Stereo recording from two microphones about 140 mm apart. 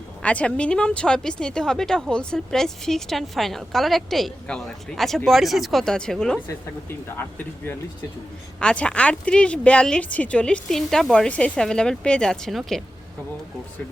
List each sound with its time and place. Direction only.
0.2 s speech: 10° left (ahead or behind)
6.8 s speech: 15° left (ahead or behind)